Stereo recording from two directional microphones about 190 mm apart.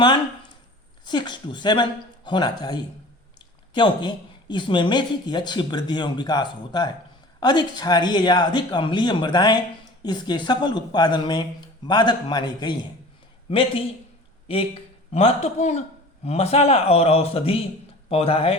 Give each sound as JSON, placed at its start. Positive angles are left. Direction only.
{"t": 1.0, "sound": "a woman's voice", "side_deg": 25}
{"t": 15.1, "sound": "a man's voice", "side_deg": 35}